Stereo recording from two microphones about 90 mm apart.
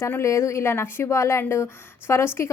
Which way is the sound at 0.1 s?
30° left (ahead or behind).